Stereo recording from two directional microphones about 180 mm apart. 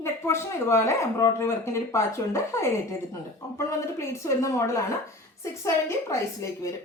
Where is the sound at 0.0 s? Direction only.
15° left (ahead or behind).